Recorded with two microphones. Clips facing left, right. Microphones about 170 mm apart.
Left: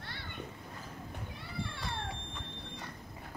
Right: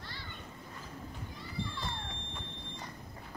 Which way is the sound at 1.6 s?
65° left (ahead or behind).